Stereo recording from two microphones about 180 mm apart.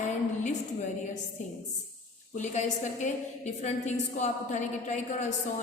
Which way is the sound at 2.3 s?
40° left (ahead or behind).